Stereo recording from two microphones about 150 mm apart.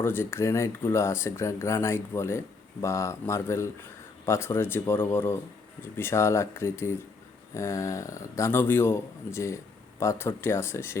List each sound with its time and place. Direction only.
0.0 s speech: 15° left (ahead or behind)